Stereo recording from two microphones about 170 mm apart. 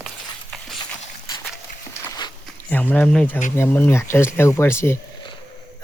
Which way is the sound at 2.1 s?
25° left (ahead or behind).